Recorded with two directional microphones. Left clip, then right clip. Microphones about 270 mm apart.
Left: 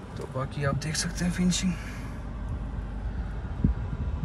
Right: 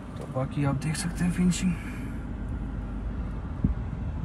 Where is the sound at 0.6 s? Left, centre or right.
Centre.